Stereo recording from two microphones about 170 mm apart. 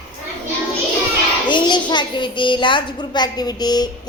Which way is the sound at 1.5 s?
25° left (ahead or behind).